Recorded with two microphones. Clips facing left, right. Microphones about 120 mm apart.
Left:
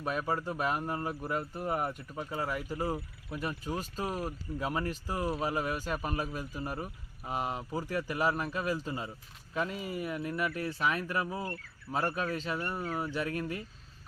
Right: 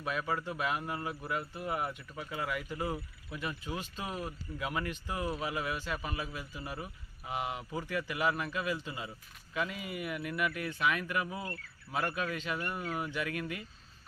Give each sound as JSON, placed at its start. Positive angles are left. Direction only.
{"t": 0.0, "sound": "speech", "side_deg": 40}